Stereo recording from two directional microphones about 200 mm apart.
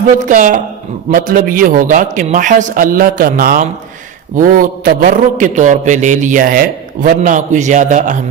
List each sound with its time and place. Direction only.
0.3 s a man's voice: 40° right (ahead or behind)